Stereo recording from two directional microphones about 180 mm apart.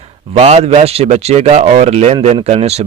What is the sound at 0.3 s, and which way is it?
Speech, 35° right (ahead or behind).